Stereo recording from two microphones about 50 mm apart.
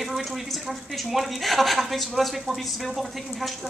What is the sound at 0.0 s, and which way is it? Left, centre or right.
Speech, centre.